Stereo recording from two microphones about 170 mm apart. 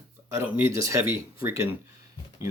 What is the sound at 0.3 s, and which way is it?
Speech, 15° right (ahead or behind).